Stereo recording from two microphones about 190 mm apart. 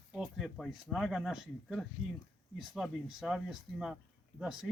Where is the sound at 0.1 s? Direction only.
Centre (ahead or behind).